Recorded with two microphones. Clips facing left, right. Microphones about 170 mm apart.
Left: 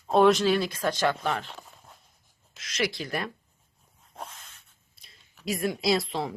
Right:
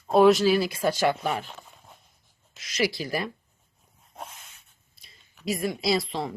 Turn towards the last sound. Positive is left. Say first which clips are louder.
# even
turn(degrees=0)  # may be behind; listen again after turning